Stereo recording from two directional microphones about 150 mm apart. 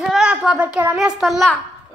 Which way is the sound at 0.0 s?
5° right (ahead or behind).